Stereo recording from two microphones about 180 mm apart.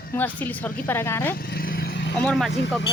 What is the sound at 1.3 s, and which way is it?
Vehicle, 55° left (ahead or behind).